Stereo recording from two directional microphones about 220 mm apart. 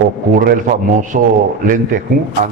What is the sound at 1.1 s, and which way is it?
Speech, 45° right (ahead or behind).